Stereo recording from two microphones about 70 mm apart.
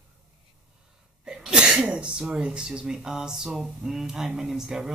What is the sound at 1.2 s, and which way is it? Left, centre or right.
Speech, centre.